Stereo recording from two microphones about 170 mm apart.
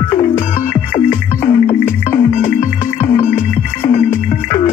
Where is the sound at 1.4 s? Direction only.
30° left (ahead or behind).